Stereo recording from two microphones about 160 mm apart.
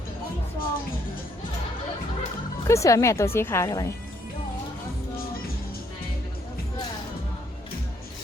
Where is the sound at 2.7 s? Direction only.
20° left (ahead or behind).